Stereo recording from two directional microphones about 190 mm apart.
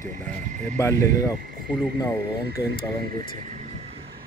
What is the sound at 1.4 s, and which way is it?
Cricket, 50° right (ahead or behind).